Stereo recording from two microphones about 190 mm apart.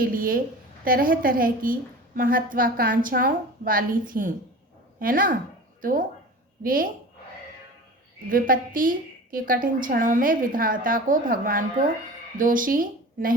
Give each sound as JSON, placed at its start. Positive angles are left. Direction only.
{"t": 0.0, "sound": "a woman's voice", "side_deg": -50}
{"t": 8.3, "sound": "a woman's voice", "side_deg": -45}